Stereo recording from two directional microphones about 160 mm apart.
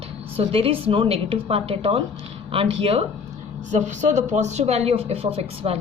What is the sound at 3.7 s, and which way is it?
Speech, 50° right (ahead or behind).